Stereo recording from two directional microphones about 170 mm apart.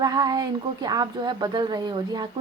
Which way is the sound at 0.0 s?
25° right (ahead or behind).